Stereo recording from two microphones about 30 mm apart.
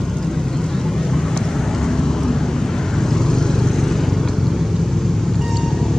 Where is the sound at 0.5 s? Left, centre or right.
Centre.